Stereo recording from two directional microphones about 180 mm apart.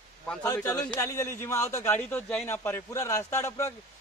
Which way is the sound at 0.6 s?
10° left (ahead or behind).